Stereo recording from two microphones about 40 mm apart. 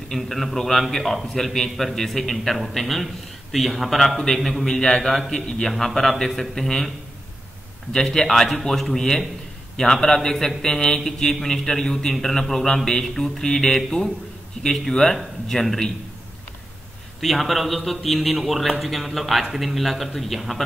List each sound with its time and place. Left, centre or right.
0.1 s a man's voice: centre
7.9 s a man's voice: centre
15.6 s speech: centre
17.2 s speech: centre